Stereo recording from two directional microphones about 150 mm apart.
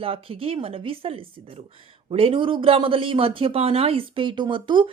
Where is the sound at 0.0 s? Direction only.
40° right (ahead or behind).